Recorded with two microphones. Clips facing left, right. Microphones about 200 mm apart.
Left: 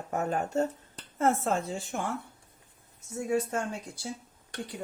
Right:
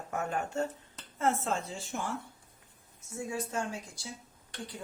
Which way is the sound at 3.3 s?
60° left (ahead or behind).